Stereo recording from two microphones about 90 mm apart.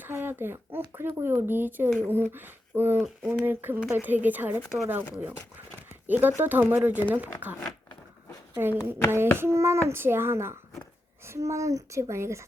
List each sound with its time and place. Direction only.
0.0 s speech: 25° right (ahead or behind)
6.1 s speech: 20° right (ahead or behind)
8.5 s a child's voice: 25° right (ahead or behind)